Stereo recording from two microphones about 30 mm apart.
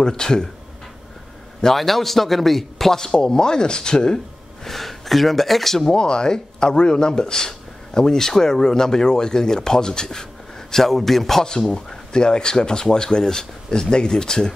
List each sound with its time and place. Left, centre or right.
0.0 s speech: left
1.8 s speech: centre
3.0 s speech: left
4.6 s speech: centre
5.9 s speech: left
10.7 s a man's voice: centre
12.1 s speech: left